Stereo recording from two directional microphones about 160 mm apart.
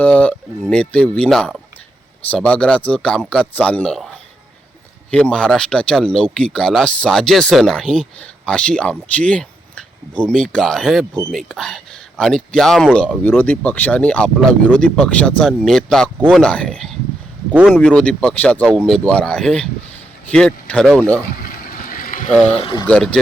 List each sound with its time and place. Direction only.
0.0 s speech: 10° left (ahead or behind)
5.1 s speech: 5° left (ahead or behind)
17.5 s a man's voice: 5° right (ahead or behind)
17.7 s speech: 5° left (ahead or behind)
21.4 s vehicle: 60° left (ahead or behind)
22.4 s speech: 35° left (ahead or behind)
22.9 s speech: 5° left (ahead or behind)